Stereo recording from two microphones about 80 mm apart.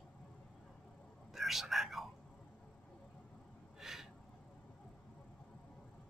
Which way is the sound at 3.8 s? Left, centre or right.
Centre.